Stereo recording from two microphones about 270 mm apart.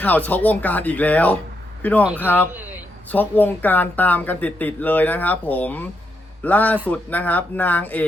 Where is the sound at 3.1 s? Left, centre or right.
Centre.